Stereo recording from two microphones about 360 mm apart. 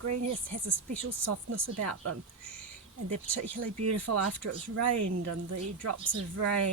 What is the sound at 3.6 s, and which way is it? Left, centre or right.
Speech, right.